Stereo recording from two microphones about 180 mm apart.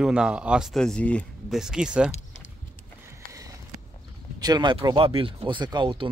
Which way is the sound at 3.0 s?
20° right (ahead or behind).